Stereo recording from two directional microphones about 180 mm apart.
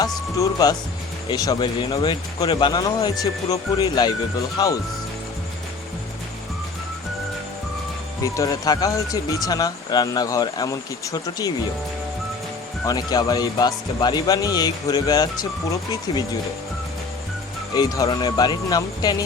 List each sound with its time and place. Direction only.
0.3 s speech: 20° left (ahead or behind)
8.2 s speech: 20° left (ahead or behind)
12.8 s speech: 20° left (ahead or behind)
17.7 s speech: 20° left (ahead or behind)